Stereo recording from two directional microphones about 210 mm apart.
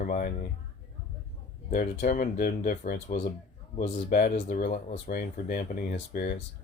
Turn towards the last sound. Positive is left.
turn(degrees=45)  # may be behind; listen again after turning